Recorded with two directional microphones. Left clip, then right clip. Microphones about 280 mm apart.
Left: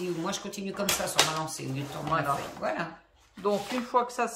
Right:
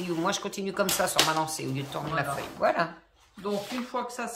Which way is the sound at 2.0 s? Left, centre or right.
Centre.